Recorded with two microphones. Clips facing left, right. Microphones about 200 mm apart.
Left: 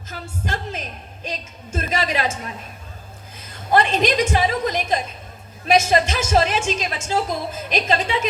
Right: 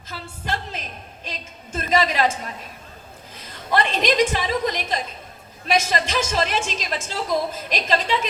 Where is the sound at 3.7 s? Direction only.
45° left (ahead or behind).